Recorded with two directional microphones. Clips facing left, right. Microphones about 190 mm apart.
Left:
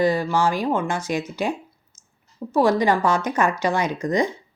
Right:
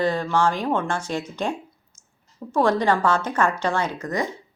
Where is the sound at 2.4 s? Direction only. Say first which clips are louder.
Left 2 dB; 10° left (ahead or behind).